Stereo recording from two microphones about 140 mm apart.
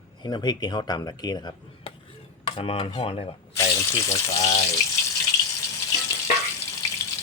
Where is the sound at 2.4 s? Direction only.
40° left (ahead or behind).